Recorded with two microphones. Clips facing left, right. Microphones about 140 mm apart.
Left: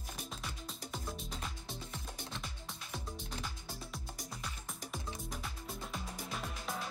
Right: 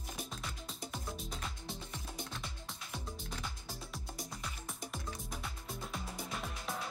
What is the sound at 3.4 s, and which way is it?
Music, centre (ahead or behind).